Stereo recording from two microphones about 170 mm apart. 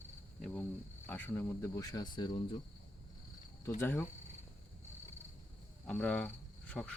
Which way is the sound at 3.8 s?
15° left (ahead or behind).